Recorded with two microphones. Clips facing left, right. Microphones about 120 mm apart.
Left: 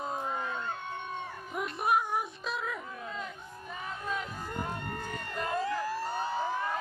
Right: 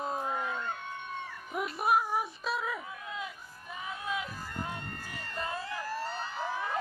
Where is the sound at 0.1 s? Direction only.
5° right (ahead or behind).